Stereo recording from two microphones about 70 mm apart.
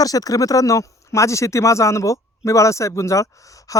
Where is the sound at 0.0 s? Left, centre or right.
Left.